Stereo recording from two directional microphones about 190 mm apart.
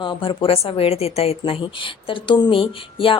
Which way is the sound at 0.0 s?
25° left (ahead or behind).